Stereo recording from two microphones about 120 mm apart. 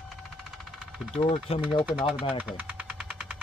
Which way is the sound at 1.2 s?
55° left (ahead or behind).